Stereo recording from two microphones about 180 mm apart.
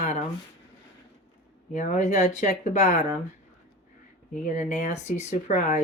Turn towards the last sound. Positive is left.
turn(degrees=40)  # may be behind; listen again after turning